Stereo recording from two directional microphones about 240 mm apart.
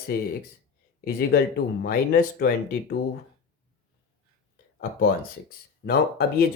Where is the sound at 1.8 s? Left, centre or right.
Left.